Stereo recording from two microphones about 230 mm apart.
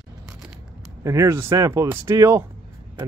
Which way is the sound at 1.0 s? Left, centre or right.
Centre.